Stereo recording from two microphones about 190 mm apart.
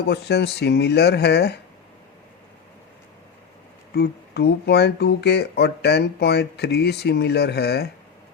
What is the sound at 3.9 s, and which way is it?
Speech, 60° left (ahead or behind).